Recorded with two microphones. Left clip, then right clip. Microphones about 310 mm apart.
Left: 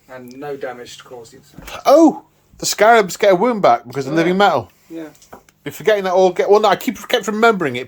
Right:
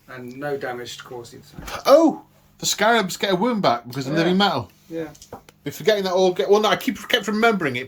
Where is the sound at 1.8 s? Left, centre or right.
Centre.